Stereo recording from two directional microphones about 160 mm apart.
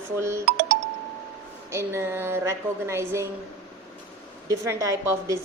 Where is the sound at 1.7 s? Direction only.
15° right (ahead or behind).